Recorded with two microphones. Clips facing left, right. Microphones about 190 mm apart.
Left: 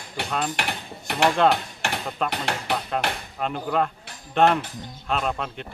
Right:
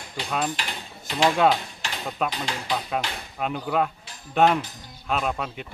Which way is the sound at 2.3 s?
65° left (ahead or behind).